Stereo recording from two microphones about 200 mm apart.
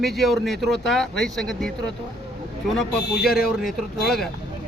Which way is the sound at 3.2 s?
50° left (ahead or behind).